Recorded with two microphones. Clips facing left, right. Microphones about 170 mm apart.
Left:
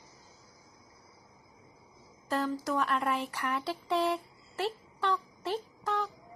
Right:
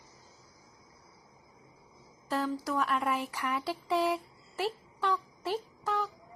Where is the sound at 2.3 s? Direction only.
5° right (ahead or behind).